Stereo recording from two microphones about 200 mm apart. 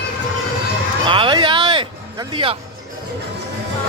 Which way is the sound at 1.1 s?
25° right (ahead or behind).